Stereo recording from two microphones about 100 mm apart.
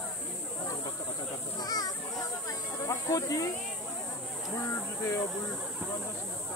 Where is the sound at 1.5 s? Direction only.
40° left (ahead or behind).